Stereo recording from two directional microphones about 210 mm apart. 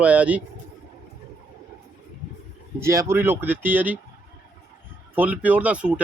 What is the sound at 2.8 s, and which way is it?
Speech, 15° right (ahead or behind).